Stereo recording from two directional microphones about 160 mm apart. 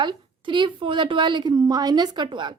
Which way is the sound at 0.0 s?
30° right (ahead or behind).